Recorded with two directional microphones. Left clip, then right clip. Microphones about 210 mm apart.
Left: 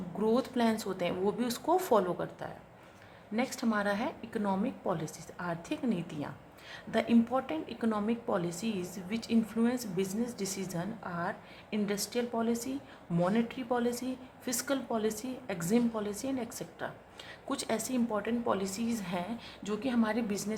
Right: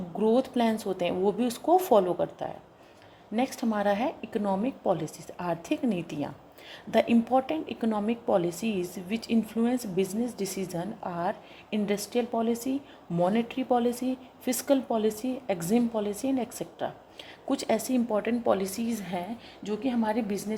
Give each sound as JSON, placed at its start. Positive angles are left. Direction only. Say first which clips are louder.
{"t": 0.2, "sound": "a woman's voice", "louder": "right 5 dB", "side_deg": -10}